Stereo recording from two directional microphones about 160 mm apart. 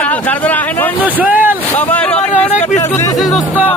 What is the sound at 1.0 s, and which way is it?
Speech, 10° right (ahead or behind).